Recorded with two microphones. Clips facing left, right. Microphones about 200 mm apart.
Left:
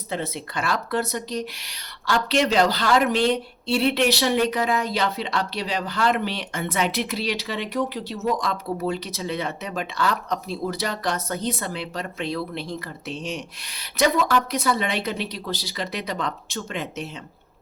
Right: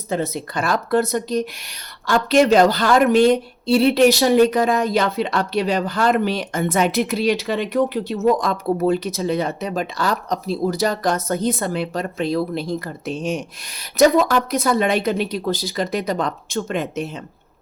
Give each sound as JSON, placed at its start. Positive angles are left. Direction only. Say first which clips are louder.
{"t": 0.1, "sound": "speech", "louder": "right 6 dB", "side_deg": -45}